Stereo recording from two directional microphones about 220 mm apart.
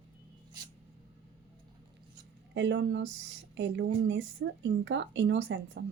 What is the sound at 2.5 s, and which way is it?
A woman's voice, 55° right (ahead or behind).